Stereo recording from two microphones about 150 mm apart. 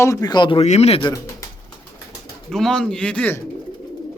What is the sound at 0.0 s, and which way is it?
Speech, 20° left (ahead or behind).